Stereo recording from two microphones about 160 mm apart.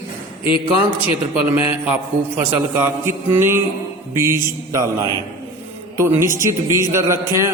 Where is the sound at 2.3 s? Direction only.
15° right (ahead or behind).